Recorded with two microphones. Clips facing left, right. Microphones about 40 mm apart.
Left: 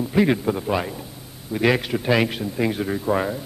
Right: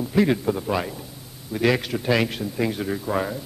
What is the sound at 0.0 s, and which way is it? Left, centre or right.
A man's voice, centre.